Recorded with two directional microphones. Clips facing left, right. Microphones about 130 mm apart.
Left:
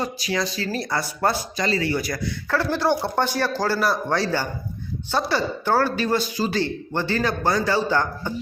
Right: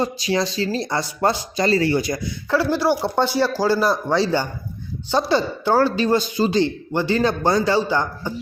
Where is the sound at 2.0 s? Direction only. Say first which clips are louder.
Right 3 dB; 20° right (ahead or behind).